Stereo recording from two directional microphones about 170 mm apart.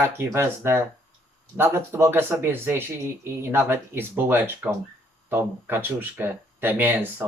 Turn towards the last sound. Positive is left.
turn(degrees=-10)  # may be behind; listen again after turning